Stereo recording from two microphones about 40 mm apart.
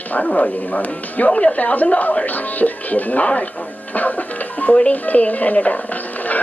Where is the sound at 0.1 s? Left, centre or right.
Left.